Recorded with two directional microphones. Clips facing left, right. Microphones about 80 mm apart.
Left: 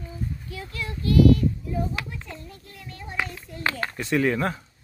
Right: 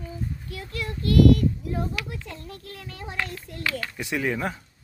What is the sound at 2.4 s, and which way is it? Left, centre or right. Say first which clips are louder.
Speech: right 3 dB; right.